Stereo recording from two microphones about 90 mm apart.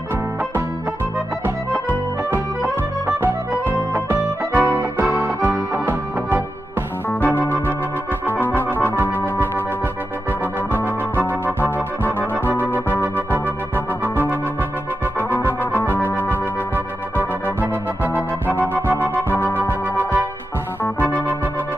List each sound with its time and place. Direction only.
3.1 s music: 25° right (ahead or behind)
7.1 s organ: 20° left (ahead or behind)
8.3 s music: 20° left (ahead or behind)
8.8 s organ: 25° right (ahead or behind)
10.7 s organ: 25° right (ahead or behind)
11.6 s organ: 20° left (ahead or behind)
12.7 s organ: 25° right (ahead or behind)
15.1 s music: 20° left (ahead or behind)
17.6 s organ: 20° right (ahead or behind)